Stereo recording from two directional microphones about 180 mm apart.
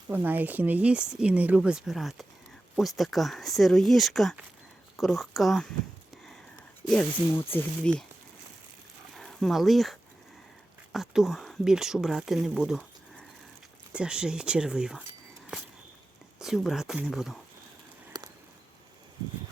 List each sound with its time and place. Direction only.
0.1 s speech: 10° right (ahead or behind)
7.5 s speech: 5° left (ahead or behind)
9.1 s speech: centre (ahead or behind)
16.4 s speech: centre (ahead or behind)
18.1 s a sound: 20° right (ahead or behind)